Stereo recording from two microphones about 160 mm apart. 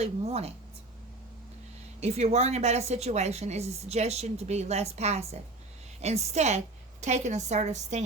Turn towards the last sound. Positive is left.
turn(degrees=-45)  # may be behind; listen again after turning